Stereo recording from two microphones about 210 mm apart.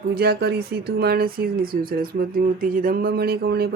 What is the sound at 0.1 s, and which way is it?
Speech, 50° right (ahead or behind).